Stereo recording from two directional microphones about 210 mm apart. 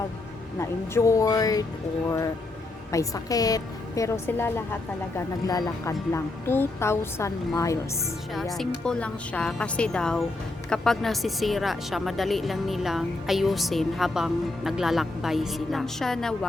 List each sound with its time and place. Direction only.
0.6 s speech: 15° left (ahead or behind)
8.5 s speech: 5° left (ahead or behind)